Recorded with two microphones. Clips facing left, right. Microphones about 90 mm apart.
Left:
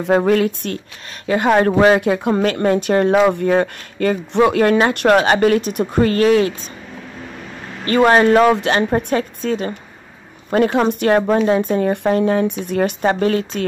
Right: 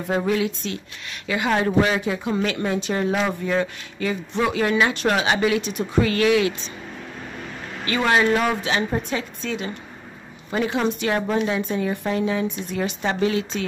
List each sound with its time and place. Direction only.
0.0 s speech: 60° left (ahead or behind)
1.2 s speech: 45° left (ahead or behind)
7.8 s speech: 45° left (ahead or behind)
8.5 s speech: 65° left (ahead or behind); by 13.7 s 50° left (ahead or behind)